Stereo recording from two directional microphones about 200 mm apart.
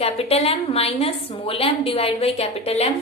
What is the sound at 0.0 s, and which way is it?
A woman's voice, 30° left (ahead or behind).